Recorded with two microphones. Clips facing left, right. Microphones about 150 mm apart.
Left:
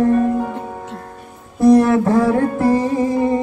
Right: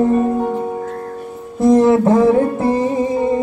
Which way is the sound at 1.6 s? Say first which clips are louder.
Even; 20° right (ahead or behind).